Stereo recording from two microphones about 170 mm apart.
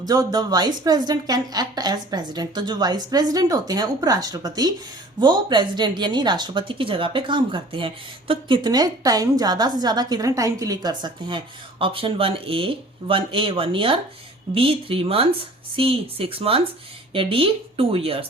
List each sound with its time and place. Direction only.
0.0 s speech: 25° right (ahead or behind)